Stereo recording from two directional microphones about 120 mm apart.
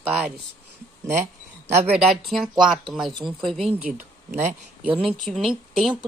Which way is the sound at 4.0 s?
80° right.